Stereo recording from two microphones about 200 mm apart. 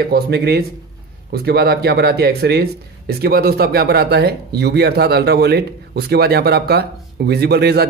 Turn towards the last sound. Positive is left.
turn(degrees=-55)  # may be behind; listen again after turning